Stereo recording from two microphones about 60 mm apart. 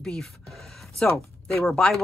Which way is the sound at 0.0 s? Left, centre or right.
Centre.